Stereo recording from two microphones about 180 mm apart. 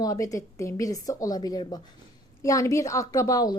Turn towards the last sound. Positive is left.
turn(degrees=20)  # may be behind; listen again after turning